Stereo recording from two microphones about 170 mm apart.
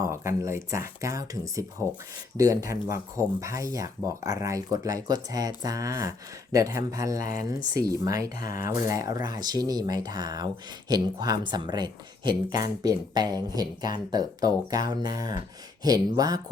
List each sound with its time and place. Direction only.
0.0 s speech: 15° right (ahead or behind)